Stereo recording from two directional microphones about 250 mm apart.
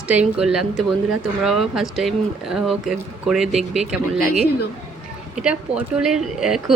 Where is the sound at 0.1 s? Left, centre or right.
Centre.